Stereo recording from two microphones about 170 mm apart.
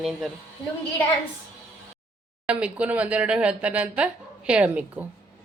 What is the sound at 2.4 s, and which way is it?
Speech, 10° right (ahead or behind).